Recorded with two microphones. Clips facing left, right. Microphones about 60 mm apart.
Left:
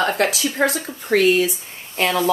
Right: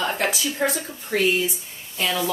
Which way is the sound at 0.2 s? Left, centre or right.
Left.